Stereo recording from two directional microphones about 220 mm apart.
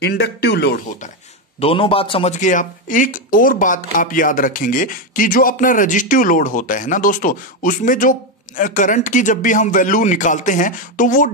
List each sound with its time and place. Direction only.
0.0 s speech: 50° left (ahead or behind)
1.6 s speech: 25° left (ahead or behind)